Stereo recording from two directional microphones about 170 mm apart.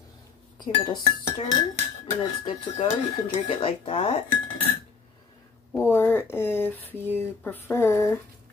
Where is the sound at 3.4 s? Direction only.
35° left (ahead or behind).